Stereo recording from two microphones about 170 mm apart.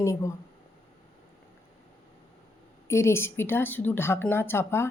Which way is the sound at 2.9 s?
15° left (ahead or behind).